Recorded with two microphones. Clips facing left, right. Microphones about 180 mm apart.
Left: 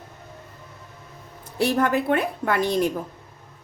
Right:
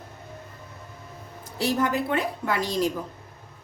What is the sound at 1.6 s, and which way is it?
A woman's voice, 60° left (ahead or behind).